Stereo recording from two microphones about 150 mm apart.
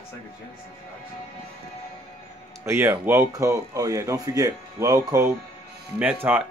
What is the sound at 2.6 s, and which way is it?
Speech, 15° right (ahead or behind).